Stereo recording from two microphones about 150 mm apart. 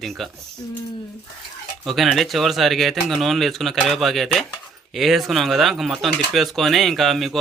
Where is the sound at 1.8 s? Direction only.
Centre (ahead or behind).